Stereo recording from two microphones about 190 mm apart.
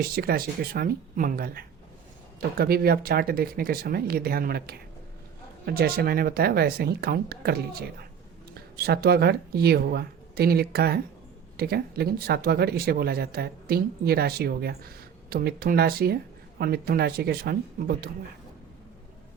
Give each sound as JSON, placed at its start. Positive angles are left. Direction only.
{"t": 0.0, "sound": "speech", "side_deg": -50}